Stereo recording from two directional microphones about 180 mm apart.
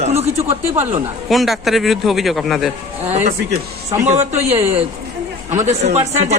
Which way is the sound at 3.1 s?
40° right (ahead or behind).